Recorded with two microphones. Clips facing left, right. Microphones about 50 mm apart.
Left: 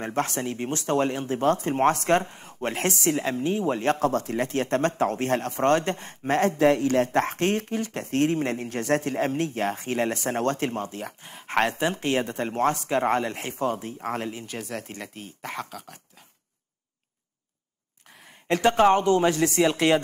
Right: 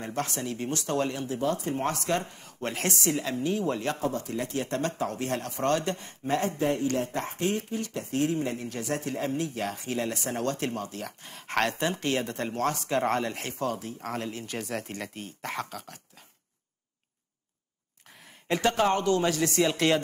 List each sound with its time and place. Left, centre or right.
0.0 s speech: left
4.3 s speech: left
6.6 s speech: left
7.1 s speech: left
10.6 s speech: left
11.1 s speech: centre
14.4 s speech: centre
18.0 s a sound: centre
18.6 s speech: left